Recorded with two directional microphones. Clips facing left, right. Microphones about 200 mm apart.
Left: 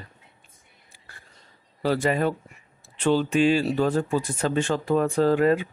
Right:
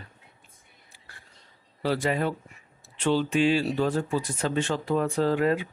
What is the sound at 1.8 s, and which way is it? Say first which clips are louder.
Speech: left 3 dB; 45° left (ahead or behind).